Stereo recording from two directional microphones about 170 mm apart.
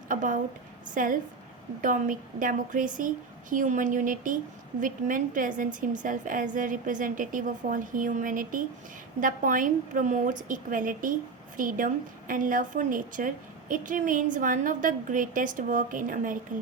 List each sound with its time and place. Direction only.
0.1 s a woman's voice: 50° right (ahead or behind)